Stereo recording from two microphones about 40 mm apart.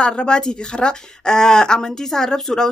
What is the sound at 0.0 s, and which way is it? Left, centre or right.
A woman's voice, left.